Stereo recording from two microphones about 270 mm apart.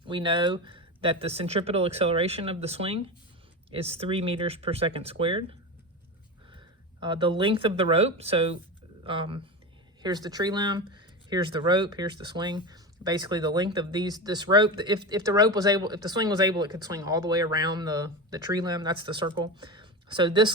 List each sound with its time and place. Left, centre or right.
0.0 s speech: centre
7.0 s speech: centre